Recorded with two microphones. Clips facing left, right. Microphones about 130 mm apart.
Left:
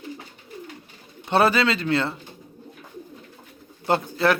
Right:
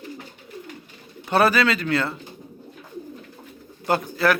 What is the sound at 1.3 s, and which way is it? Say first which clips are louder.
Speech: even; 25° left (ahead or behind).